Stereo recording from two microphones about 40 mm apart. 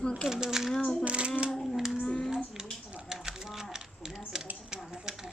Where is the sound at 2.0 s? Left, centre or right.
Centre.